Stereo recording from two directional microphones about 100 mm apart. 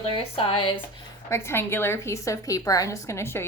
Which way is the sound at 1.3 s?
25° left (ahead or behind).